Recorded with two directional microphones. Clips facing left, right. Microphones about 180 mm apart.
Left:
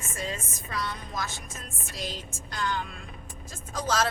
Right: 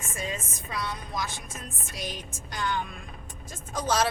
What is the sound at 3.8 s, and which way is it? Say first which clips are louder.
Speech: right 1 dB; 15° right (ahead or behind).